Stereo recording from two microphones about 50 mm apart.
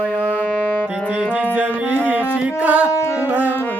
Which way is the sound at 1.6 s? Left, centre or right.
Right.